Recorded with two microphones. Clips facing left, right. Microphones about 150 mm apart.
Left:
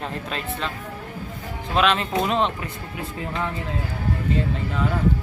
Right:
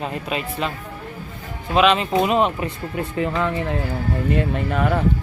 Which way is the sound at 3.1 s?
75° right (ahead or behind).